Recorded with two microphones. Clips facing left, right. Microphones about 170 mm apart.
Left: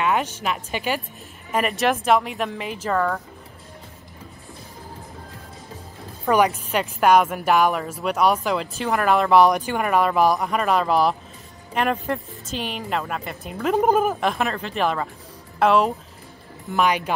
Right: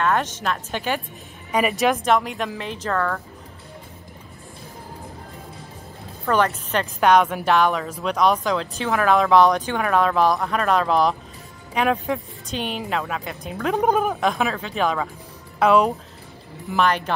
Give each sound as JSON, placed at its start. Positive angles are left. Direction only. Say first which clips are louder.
{"t": 0.0, "sound": "speech", "louder": "right 1 dB", "side_deg": 10}
{"t": 6.2, "sound": "speech", "louder": "left 2 dB", "side_deg": 10}